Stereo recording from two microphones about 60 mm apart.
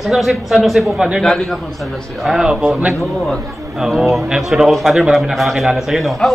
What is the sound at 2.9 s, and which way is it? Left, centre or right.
Speech, centre.